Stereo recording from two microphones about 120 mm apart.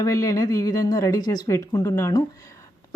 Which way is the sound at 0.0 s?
25° left (ahead or behind).